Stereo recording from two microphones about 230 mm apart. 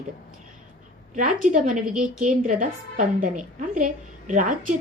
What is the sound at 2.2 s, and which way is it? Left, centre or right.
A woman's voice, right.